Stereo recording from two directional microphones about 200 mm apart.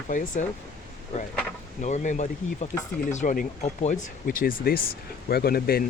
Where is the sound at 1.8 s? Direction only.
35° left (ahead or behind).